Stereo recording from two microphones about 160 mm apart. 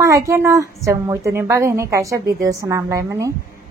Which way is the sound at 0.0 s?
20° right (ahead or behind).